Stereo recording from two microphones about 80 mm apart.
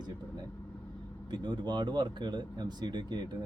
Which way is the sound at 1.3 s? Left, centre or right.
Right.